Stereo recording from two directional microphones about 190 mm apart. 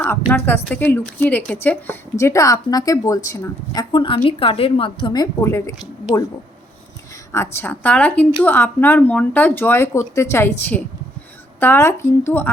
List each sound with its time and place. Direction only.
0.0 s a woman's voice: 10° left (ahead or behind)
7.3 s speech: 10° left (ahead or behind)